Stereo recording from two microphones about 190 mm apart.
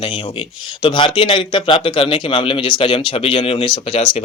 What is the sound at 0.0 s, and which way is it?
A man's voice, 25° left (ahead or behind).